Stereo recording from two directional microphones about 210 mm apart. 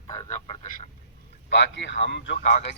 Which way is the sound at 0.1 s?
15° left (ahead or behind).